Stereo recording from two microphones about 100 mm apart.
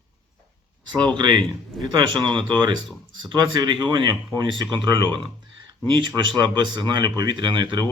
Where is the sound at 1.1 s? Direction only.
50° right (ahead or behind).